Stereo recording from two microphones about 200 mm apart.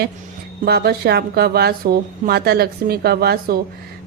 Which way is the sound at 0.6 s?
50° right (ahead or behind).